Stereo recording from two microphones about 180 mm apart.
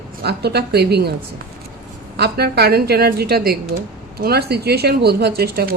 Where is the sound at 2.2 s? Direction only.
65° right (ahead or behind).